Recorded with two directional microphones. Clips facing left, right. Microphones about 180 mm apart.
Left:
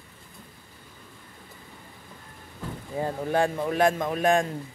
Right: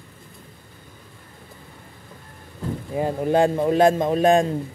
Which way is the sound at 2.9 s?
20° right (ahead or behind).